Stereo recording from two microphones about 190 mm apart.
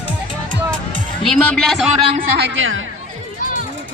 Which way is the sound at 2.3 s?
70° right (ahead or behind).